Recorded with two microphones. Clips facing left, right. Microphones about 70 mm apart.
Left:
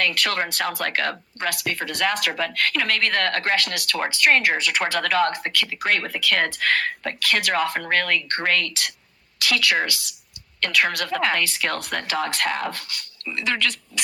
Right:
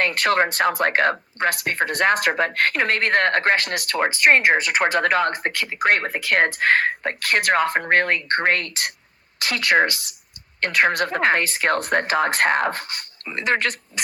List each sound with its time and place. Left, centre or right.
0.0 s speech: right
4.9 s speech: right